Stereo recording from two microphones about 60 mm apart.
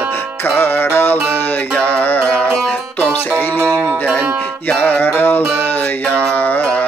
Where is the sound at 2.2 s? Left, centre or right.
Left.